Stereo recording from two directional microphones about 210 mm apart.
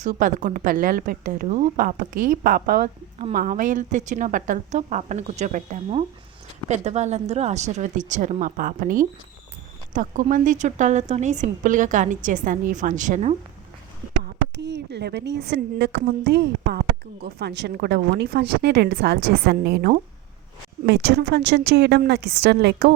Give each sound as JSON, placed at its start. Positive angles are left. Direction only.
{"t": 0.0, "sound": "a woman's voice", "side_deg": -40}
{"t": 14.3, "sound": "a woman's voice", "side_deg": -55}